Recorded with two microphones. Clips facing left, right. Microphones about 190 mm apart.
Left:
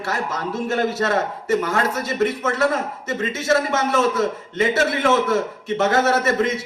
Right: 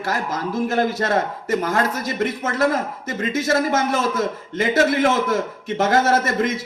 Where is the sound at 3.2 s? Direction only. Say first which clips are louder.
Right 1 dB; 40° right (ahead or behind).